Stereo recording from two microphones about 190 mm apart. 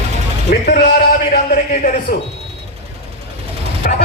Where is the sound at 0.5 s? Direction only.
50° left (ahead or behind).